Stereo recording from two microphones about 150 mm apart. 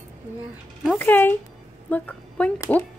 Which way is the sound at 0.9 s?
15° left (ahead or behind).